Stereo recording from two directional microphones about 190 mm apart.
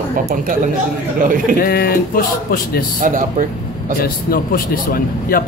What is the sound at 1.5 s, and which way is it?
Speech, 50° left (ahead or behind).